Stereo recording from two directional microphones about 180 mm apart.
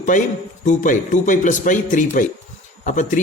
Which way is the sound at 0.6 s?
45° left (ahead or behind).